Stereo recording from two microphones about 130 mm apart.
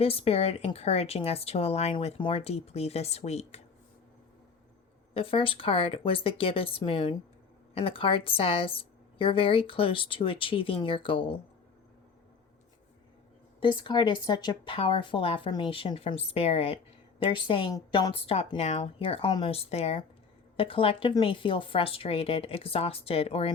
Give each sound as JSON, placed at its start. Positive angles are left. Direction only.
{"t": 0.0, "sound": "a woman's voice", "side_deg": 50}
{"t": 5.1, "sound": "a woman's voice", "side_deg": 45}
{"t": 13.6, "sound": "a woman's voice", "side_deg": 40}
{"t": 17.7, "sound": "a woman's voice", "side_deg": 30}
{"t": 18.1, "sound": "a woman's voice", "side_deg": 45}